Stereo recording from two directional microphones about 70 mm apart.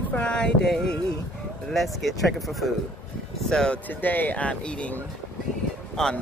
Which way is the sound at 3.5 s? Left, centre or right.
Centre.